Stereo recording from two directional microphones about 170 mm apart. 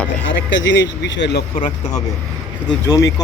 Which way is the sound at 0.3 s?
90° left.